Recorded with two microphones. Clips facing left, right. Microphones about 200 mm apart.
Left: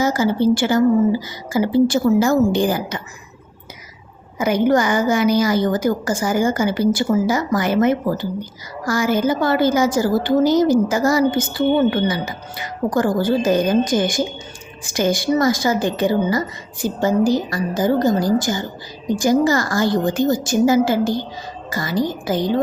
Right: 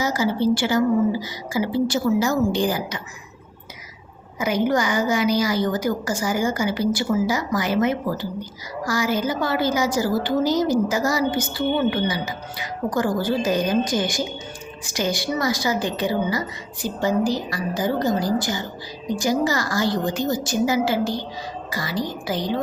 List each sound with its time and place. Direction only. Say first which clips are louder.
0.0 s a woman's voice: left 4 dB; 50° left (ahead or behind)
4.4 s a woman's voice: left 5 dB; 50° left (ahead or behind)